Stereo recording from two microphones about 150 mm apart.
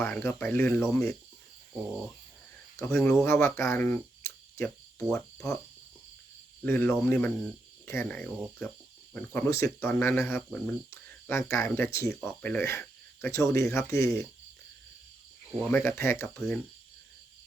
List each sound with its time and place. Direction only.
0.0 s speech: 15° left (ahead or behind)
2.7 s speech: 15° left (ahead or behind)
4.9 s cricket: 5° left (ahead or behind)
6.6 s speech: 15° left (ahead or behind)
15.7 s speech: 15° left (ahead or behind)